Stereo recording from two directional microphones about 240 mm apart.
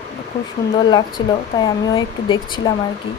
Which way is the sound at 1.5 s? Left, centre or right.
Centre.